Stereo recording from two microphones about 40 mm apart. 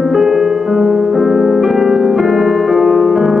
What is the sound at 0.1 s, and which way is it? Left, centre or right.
Music, centre.